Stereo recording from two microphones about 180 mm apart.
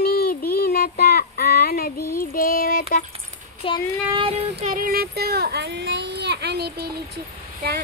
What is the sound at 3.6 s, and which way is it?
Speech, 30° left (ahead or behind).